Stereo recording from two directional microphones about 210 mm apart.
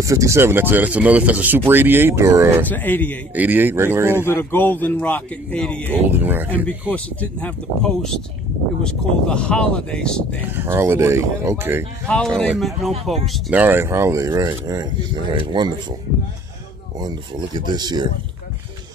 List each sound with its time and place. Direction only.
0.0 s speech: 15° right (ahead or behind)
2.6 s speech: 10° left (ahead or behind)
3.3 s speech: 10° right (ahead or behind)
4.2 s speech: 10° left (ahead or behind)
6.0 s speech: 10° right (ahead or behind)
6.9 s speech: 5° left (ahead or behind)
10.4 s speech: 10° right (ahead or behind)
12.1 s speech: 5° left (ahead or behind); by 15.7 s 20° right (ahead or behind)
17.0 s speech: 20° right (ahead or behind)